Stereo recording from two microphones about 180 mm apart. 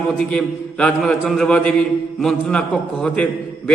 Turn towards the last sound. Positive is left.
turn(degrees=5)  # may be behind; listen again after turning